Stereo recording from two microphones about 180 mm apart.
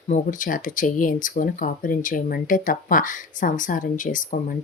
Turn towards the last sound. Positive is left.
turn(degrees=45)  # may be behind; listen again after turning